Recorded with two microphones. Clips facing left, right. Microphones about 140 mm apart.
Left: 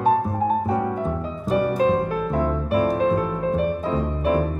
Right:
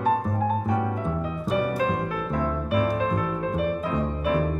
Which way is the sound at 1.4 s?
30° left (ahead or behind).